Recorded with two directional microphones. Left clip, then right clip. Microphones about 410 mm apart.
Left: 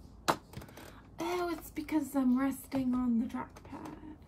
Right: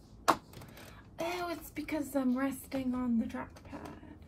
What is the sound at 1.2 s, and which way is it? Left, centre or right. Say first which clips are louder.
A woman's voice: left 2 dB; centre.